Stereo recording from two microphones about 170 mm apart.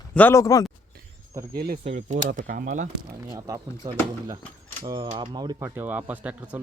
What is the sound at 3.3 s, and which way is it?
Speech, 20° right (ahead or behind).